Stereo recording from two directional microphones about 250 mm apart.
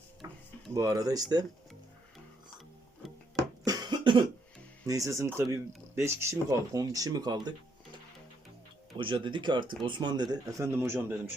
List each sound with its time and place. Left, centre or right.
0.2 s a sound: centre
0.7 s speech: centre
3.6 s cough: centre
4.9 s speech: centre
9.0 s speech: centre